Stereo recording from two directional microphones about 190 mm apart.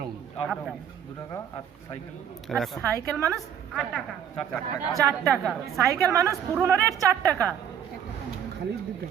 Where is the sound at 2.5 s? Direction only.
Centre (ahead or behind).